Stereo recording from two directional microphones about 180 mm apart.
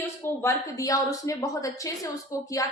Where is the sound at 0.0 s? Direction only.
15° left (ahead or behind).